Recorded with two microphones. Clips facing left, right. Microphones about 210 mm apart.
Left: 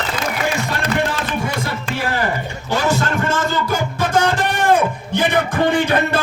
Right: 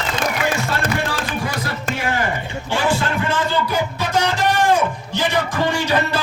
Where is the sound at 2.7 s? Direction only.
40° left (ahead or behind).